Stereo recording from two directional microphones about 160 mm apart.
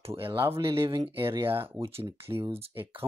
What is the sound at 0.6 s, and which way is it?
Speech, 35° right (ahead or behind).